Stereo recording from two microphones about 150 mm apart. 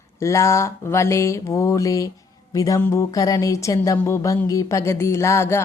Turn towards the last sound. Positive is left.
turn(degrees=20)  # may be behind; listen again after turning